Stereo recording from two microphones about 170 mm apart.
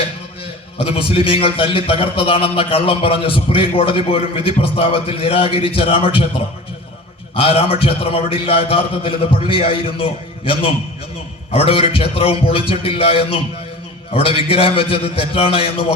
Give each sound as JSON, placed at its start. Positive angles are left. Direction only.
{"t": 0.8, "sound": "a man's voice", "side_deg": 35}
{"t": 7.3, "sound": "a man's voice", "side_deg": 35}